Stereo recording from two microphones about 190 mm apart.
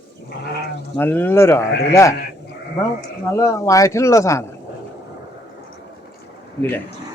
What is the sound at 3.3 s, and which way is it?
Speech, 15° left (ahead or behind).